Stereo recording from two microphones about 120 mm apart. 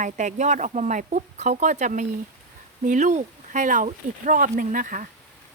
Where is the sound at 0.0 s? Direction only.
90° right.